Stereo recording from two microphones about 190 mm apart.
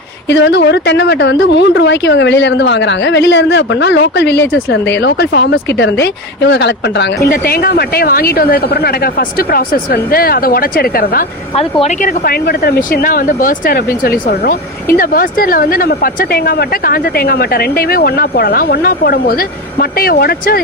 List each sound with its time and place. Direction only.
0.3 s a woman's voice: 70° left (ahead or behind)
7.3 s speech: 50° left (ahead or behind)
11.5 s speech: 35° left (ahead or behind)
12.0 s speech: 50° left (ahead or behind)